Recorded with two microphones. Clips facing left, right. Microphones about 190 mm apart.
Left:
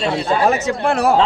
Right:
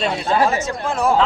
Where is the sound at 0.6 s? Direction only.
70° left (ahead or behind).